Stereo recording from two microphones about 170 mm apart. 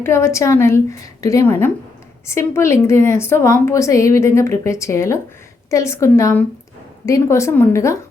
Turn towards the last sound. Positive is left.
turn(degrees=15)  # may be behind; listen again after turning